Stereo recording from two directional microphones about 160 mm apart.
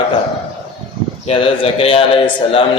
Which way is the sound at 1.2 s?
35° left (ahead or behind).